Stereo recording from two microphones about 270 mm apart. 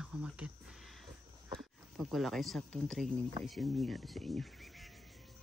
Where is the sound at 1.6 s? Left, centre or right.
Centre.